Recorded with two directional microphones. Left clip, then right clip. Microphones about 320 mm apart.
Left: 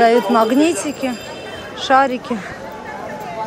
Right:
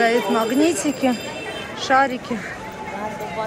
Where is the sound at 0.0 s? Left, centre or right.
Centre.